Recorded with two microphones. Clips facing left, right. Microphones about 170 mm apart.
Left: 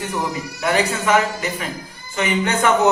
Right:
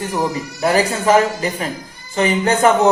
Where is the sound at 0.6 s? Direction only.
35° right (ahead or behind).